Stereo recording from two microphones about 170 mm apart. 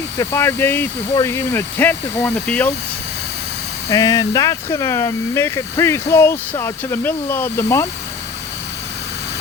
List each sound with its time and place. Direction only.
0.2 s speech: 15° left (ahead or behind)
3.8 s speech: 20° left (ahead or behind)